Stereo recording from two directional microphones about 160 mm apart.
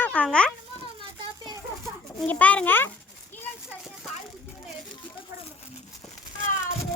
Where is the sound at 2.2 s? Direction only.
10° left (ahead or behind).